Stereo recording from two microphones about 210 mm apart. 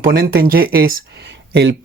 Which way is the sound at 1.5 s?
55° right (ahead or behind).